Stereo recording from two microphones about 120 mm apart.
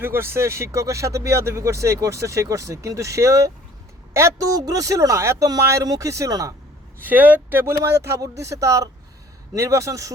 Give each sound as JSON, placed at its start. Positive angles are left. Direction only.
{"t": 0.0, "sound": "speech", "side_deg": -20}
{"t": 7.0, "sound": "speech", "side_deg": -15}